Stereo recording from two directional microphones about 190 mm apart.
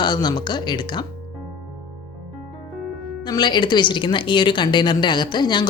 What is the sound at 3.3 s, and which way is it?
Speech, 25° left (ahead or behind).